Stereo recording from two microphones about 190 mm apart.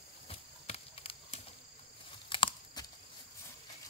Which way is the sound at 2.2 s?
25° left (ahead or behind).